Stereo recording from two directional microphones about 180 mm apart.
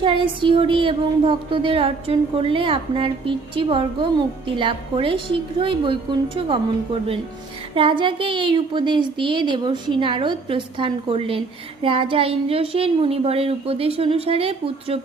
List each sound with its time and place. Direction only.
0.0 s a woman's voice: 30° right (ahead or behind)